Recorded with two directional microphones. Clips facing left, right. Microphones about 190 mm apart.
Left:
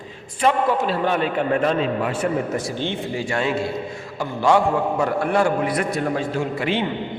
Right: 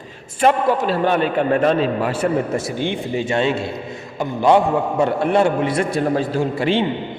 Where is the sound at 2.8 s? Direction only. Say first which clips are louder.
Right 3 dB; 20° right (ahead or behind).